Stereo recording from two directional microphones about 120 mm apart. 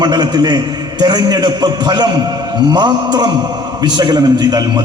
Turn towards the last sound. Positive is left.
turn(degrees=-35)  # may be behind; listen again after turning